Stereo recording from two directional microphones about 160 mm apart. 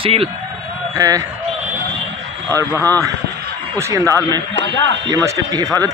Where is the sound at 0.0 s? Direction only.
35° right (ahead or behind).